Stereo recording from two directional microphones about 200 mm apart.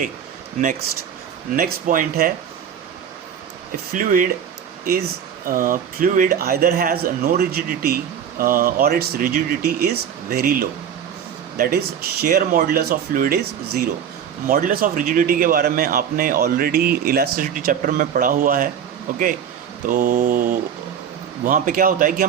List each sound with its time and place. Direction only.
1.5 s speech: 45° right (ahead or behind)
3.7 s speech: 45° right (ahead or behind)
5.5 s speech: 40° right (ahead or behind)
19.9 s speech: 45° right (ahead or behind)